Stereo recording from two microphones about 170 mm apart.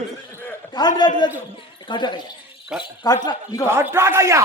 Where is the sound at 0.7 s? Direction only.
25° left (ahead or behind).